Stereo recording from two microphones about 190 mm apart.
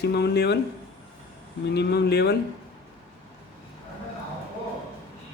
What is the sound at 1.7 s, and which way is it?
Speech, 60° left (ahead or behind).